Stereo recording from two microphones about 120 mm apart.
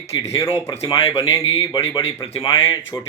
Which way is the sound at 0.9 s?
45° left (ahead or behind).